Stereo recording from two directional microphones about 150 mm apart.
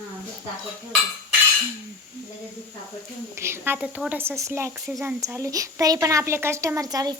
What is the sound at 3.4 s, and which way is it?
A woman's voice, 15° right (ahead or behind).